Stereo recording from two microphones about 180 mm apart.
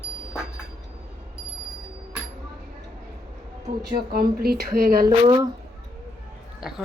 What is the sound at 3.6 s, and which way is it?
Speech, 55° right (ahead or behind).